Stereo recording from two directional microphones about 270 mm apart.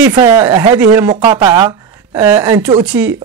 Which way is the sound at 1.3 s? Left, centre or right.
Centre.